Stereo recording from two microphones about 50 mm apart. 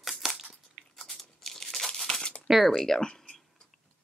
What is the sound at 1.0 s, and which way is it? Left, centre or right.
Tearing, centre.